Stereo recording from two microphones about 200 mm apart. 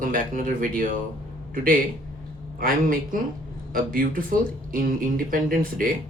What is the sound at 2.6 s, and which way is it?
Speech, 45° right (ahead or behind).